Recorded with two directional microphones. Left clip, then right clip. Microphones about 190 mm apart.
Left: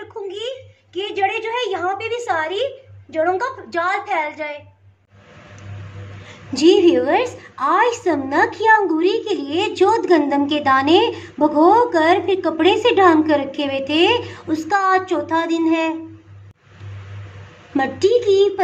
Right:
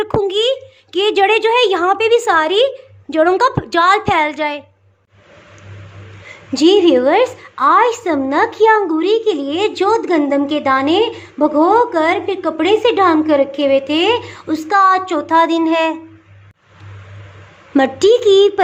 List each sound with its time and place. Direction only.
0.3 s a woman's voice: 60° right (ahead or behind)
6.5 s a woman's voice: 35° right (ahead or behind)
17.7 s a woman's voice: 35° right (ahead or behind)